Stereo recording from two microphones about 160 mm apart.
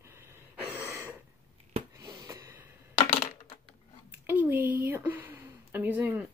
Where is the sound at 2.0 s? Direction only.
20° right (ahead or behind).